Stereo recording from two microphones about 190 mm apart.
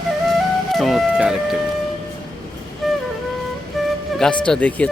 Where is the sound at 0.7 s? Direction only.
Centre (ahead or behind).